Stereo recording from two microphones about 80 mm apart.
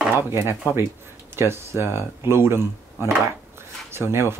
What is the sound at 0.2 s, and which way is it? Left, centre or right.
Speech, right.